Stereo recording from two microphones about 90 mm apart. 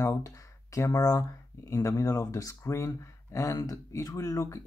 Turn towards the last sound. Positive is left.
turn(degrees=35)  # may be behind; listen again after turning